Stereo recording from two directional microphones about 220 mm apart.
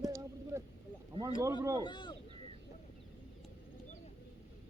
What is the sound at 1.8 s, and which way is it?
Speech, 20° left (ahead or behind).